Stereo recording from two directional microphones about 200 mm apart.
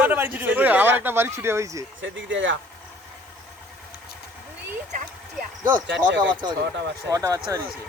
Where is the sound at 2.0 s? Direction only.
70° right (ahead or behind).